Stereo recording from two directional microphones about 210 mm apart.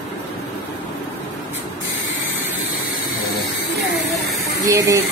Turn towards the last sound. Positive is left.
turn(degrees=-15)  # may be behind; listen again after turning